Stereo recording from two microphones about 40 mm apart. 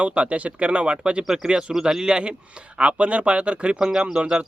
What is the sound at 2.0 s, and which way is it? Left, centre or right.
A man's voice, right.